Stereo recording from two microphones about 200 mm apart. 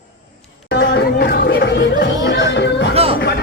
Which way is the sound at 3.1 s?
55° left (ahead or behind).